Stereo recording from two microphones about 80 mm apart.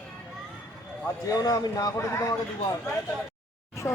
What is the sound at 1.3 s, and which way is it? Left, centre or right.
Speech, left.